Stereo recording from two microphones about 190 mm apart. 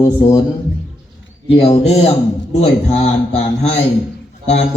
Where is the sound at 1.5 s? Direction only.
30° left (ahead or behind).